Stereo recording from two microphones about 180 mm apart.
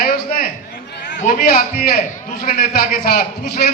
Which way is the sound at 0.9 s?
75° left (ahead or behind).